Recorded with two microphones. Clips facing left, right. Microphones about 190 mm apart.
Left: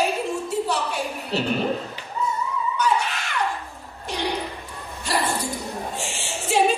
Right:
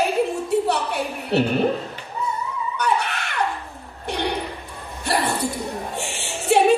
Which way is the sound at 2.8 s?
60° right (ahead or behind).